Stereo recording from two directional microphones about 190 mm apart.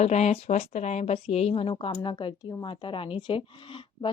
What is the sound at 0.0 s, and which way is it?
A woman's voice, 35° left (ahead or behind).